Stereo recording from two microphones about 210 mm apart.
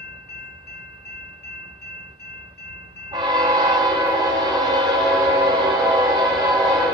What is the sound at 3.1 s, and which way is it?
Train, 20° right (ahead or behind).